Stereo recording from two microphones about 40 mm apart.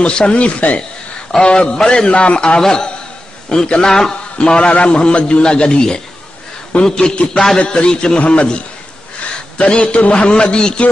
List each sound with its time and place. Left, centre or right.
0.0 s a man's voice: left
4.6 s a man's voice: left